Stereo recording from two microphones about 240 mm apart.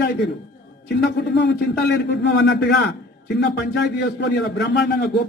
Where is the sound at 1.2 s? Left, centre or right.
Left.